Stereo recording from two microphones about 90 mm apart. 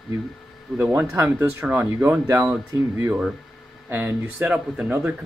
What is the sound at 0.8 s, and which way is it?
Speech, 25° right (ahead or behind).